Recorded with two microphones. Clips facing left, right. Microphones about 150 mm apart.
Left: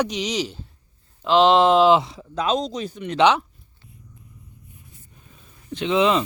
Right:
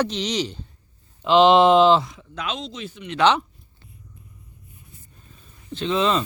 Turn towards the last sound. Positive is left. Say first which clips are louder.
# left 2 dB
turn(degrees=15)  # may be behind; listen again after turning